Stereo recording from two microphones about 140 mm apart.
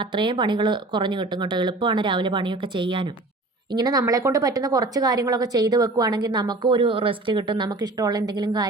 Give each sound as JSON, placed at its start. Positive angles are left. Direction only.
{"t": 0.0, "sound": "speech", "side_deg": -35}